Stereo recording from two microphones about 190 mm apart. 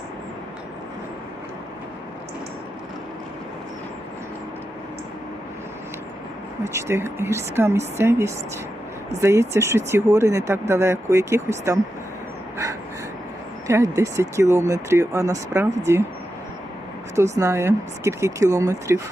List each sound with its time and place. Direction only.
6.7 s speech: 15° right (ahead or behind)
13.7 s speech: 15° right (ahead or behind)
17.3 s speech: 15° right (ahead or behind)